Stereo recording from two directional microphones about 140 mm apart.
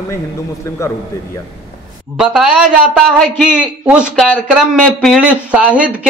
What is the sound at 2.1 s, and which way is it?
A woman's voice, 5° right (ahead or behind).